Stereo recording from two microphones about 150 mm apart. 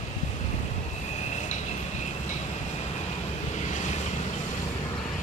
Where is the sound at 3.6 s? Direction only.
50° left (ahead or behind).